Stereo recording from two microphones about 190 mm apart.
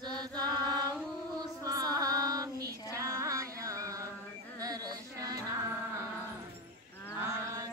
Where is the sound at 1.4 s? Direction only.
20° right (ahead or behind).